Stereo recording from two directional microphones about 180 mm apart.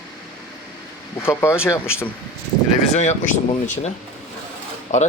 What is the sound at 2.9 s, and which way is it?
Speech, 40° left (ahead or behind).